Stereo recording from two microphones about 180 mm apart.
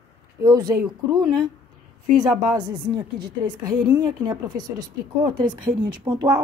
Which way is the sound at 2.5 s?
25° right (ahead or behind).